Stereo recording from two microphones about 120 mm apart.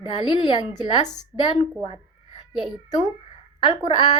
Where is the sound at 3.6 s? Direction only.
40° left (ahead or behind).